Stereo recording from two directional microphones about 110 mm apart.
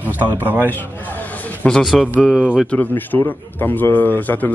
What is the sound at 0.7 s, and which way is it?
A man's voice, 15° left (ahead or behind).